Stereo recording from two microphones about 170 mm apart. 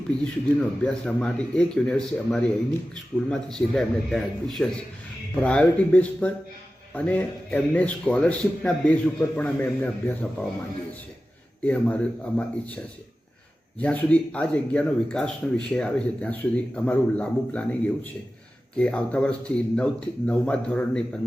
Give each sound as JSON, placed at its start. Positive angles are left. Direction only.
{"t": 0.9, "sound": "speech", "side_deg": 5}
{"t": 11.6, "sound": "speech", "side_deg": 10}
{"t": 13.8, "sound": "speech", "side_deg": 10}